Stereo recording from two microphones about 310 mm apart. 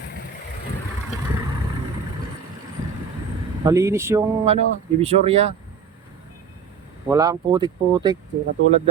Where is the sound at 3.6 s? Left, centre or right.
Centre.